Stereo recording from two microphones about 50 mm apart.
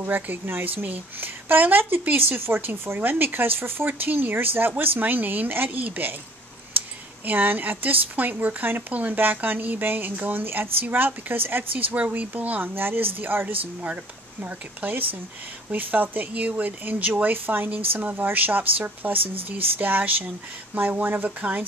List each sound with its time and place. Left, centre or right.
0.0 s speech: right
7.2 s speech: right
11.9 s speech: right